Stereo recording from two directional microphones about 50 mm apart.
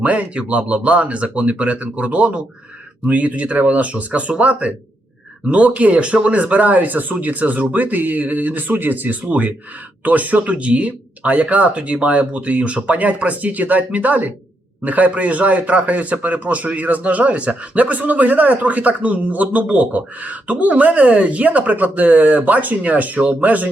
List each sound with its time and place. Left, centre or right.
0.0 s a man's voice: right